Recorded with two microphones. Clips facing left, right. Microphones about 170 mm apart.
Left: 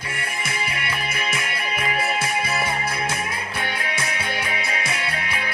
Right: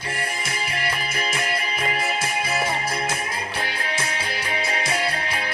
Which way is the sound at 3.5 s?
30° right (ahead or behind).